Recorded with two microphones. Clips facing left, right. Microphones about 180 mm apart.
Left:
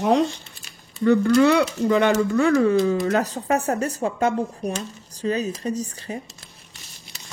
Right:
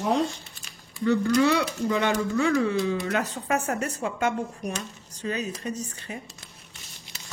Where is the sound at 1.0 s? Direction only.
60° left (ahead or behind); by 6.1 s 35° left (ahead or behind).